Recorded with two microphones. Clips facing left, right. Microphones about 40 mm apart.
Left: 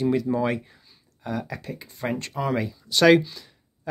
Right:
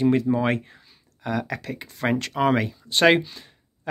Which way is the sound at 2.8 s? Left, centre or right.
Right.